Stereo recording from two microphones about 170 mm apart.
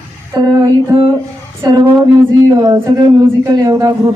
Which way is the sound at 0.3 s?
25° right (ahead or behind).